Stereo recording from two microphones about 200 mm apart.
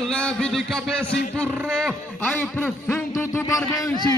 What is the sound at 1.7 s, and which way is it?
A man's voice, 5° left (ahead or behind).